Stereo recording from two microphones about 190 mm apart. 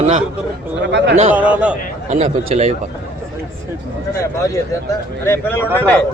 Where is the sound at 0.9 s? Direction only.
65° right (ahead or behind).